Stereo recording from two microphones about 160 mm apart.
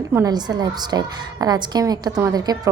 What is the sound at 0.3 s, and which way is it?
A woman's voice, 25° right (ahead or behind).